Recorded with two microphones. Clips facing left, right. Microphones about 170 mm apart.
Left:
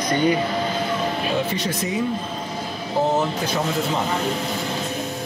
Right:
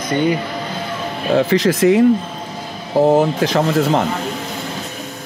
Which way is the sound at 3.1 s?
90° right.